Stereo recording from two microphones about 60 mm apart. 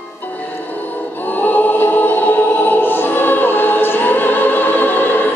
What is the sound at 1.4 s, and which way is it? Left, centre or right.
Choir, left.